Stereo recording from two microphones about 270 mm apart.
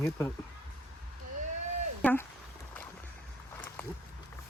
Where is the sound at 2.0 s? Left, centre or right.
Centre.